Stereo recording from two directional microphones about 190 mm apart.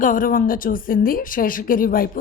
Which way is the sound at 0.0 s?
45° left (ahead or behind).